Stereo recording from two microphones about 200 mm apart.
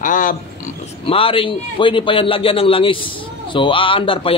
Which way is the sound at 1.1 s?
30° left (ahead or behind).